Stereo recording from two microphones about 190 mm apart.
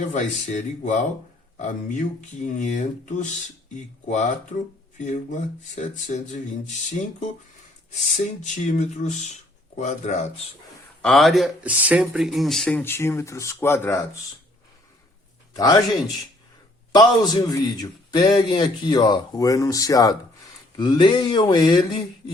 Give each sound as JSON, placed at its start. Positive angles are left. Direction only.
{"t": 0.1, "sound": "speech", "side_deg": 40}
{"t": 8.0, "sound": "speech", "side_deg": 40}
{"t": 11.0, "sound": "speech", "side_deg": 0}
{"t": 15.5, "sound": "a man's voice", "side_deg": 20}
{"t": 16.9, "sound": "a man's voice", "side_deg": 20}